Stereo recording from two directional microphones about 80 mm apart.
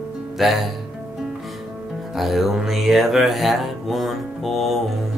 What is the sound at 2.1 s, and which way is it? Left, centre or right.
Music, centre.